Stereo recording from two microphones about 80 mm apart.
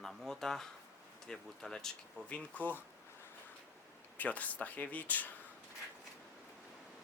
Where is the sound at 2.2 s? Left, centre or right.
Centre.